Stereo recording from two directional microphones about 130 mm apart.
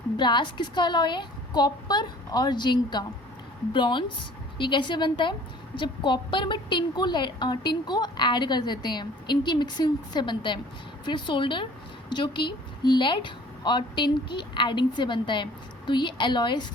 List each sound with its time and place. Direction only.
0.2 s a woman's voice: 35° left (ahead or behind)